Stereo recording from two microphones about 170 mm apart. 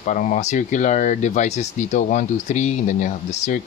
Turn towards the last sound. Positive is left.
turn(degrees=45)  # may be behind; listen again after turning